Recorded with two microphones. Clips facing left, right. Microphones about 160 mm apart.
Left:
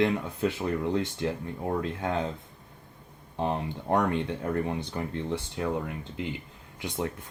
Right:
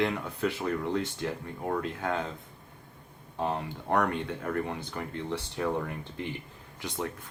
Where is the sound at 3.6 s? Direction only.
20° left (ahead or behind).